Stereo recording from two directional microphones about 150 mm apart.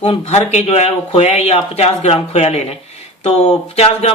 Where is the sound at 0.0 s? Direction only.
40° left (ahead or behind).